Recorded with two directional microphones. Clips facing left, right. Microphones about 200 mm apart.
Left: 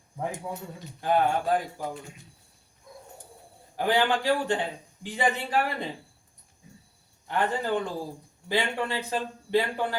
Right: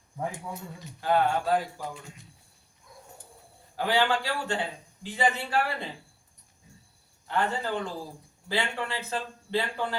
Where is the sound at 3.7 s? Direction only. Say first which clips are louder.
Left 1 dB; 15° left (ahead or behind).